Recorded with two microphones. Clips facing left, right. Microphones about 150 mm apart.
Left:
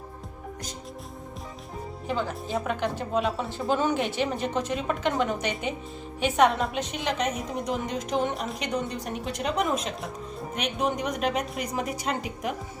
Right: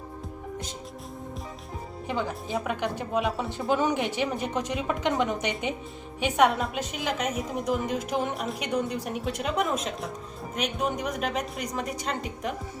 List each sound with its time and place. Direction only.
2.0 s a woman's voice: 15° right (ahead or behind); by 12.5 s 5° left (ahead or behind)